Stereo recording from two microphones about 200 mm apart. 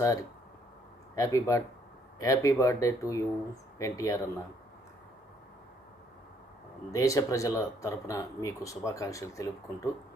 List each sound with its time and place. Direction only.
0.0 s speech: 15° left (ahead or behind)
6.9 s speech: 15° left (ahead or behind)